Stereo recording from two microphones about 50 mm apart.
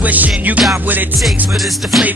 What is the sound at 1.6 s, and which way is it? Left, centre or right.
Music, centre.